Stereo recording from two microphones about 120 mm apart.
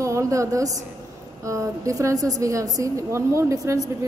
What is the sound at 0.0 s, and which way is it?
A woman's voice, 25° right (ahead or behind).